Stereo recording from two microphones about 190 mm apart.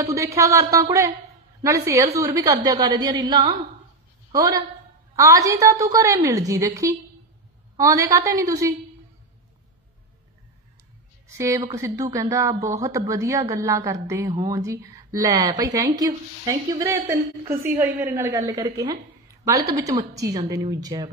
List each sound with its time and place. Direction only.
0.1 s a woman's voice: 15° right (ahead or behind)
11.3 s a woman's voice: 15° right (ahead or behind)